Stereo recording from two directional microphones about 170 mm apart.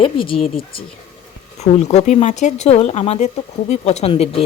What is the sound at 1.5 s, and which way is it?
Speech, 40° left (ahead or behind).